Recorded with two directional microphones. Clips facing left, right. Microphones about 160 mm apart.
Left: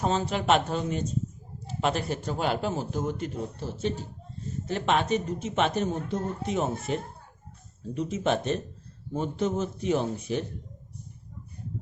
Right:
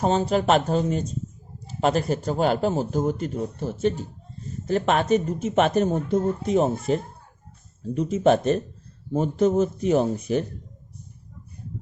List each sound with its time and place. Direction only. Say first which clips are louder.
0.0 s a man's voice: right 6 dB; 35° right (ahead or behind)